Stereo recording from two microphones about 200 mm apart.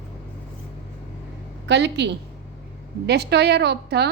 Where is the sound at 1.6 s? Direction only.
60° right (ahead or behind).